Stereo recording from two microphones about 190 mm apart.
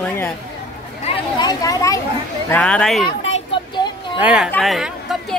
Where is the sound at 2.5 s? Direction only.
5° left (ahead or behind).